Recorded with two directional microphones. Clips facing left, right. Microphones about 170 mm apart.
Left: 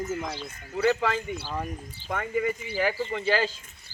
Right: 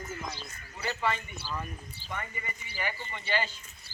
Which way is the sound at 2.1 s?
90° left.